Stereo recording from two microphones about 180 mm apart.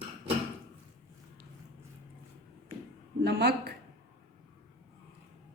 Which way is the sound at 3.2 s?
65° right (ahead or behind).